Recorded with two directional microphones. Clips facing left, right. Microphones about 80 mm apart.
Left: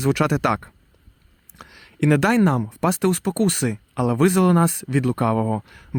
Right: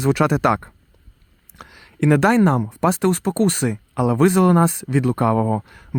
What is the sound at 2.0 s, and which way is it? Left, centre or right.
Speech, right.